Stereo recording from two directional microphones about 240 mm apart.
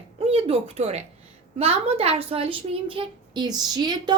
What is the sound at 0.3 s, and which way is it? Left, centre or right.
A woman's voice, right.